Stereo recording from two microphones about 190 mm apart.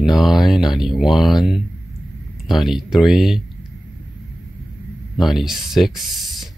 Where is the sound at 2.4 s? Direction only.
Centre (ahead or behind).